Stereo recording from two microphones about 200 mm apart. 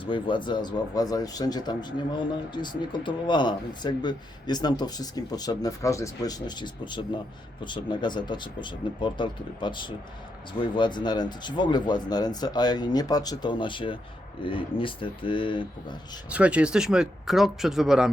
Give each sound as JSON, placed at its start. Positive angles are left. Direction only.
{"t": 0.0, "sound": "speech", "side_deg": 25}
{"t": 16.3, "sound": "speech", "side_deg": -5}